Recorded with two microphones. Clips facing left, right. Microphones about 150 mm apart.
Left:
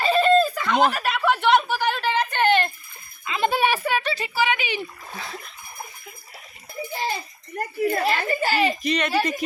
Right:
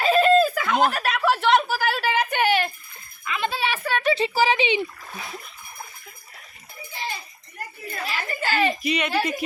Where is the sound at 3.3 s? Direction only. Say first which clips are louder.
Even; 20° left (ahead or behind).